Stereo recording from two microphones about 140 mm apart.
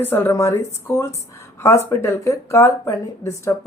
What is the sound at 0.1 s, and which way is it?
Speech, 20° left (ahead or behind).